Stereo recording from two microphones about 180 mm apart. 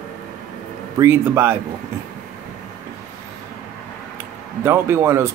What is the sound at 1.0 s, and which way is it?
Speech, 15° right (ahead or behind).